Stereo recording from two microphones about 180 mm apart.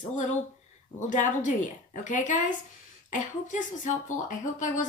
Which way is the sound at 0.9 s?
45° left (ahead or behind).